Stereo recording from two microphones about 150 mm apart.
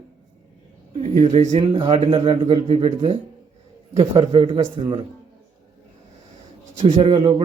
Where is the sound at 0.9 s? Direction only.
45° right (ahead or behind).